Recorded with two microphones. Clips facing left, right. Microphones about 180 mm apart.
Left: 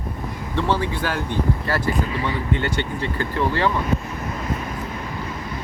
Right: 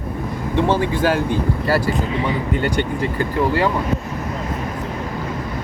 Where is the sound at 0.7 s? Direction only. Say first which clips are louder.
Right 4 dB; 45° right (ahead or behind).